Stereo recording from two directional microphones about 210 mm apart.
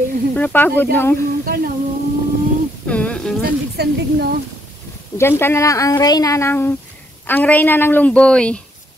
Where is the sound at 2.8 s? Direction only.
5° left (ahead or behind).